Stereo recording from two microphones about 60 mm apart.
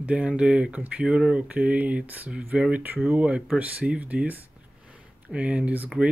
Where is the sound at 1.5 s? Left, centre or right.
Right.